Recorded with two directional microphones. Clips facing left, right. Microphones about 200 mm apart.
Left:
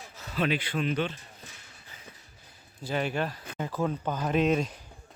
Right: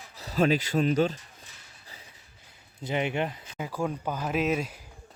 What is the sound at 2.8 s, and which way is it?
Speech, 20° right (ahead or behind).